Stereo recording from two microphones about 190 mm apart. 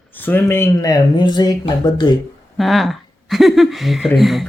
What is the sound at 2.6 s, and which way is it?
Speech, centre (ahead or behind).